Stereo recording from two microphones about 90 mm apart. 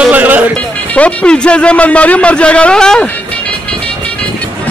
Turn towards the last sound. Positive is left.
turn(degrees=10)  # may be behind; listen again after turning